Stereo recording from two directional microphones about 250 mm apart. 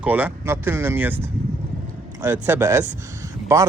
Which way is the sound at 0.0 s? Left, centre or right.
Centre.